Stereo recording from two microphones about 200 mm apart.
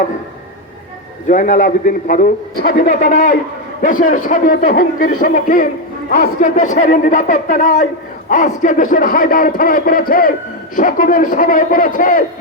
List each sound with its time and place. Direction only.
1.3 s a man's voice: 40° left (ahead or behind)